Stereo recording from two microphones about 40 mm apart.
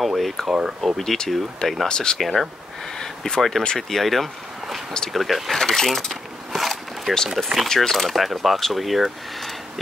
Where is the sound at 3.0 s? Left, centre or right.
Centre.